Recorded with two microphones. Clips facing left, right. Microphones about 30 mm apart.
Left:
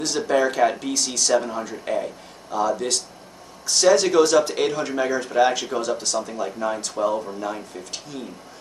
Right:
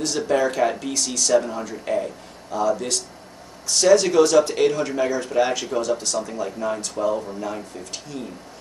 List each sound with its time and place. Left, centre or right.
0.0 s speech: centre
1.3 s speech: centre